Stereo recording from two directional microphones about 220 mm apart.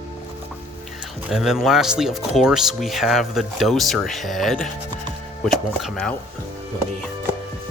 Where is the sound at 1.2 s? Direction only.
Centre (ahead or behind).